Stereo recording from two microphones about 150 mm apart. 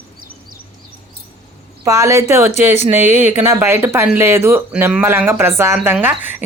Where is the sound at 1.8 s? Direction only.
20° right (ahead or behind).